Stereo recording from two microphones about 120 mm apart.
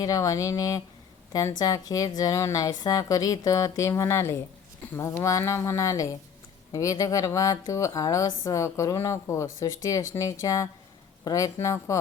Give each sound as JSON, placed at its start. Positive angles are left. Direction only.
{"t": 0.0, "sound": "a woman's voice", "side_deg": 30}